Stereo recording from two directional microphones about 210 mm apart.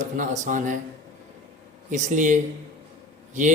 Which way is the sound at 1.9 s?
35° right (ahead or behind).